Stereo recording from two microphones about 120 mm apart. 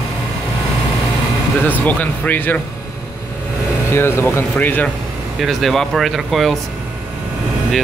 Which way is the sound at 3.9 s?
20° left (ahead or behind).